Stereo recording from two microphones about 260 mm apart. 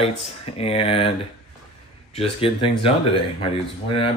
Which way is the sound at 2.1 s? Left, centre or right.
Left.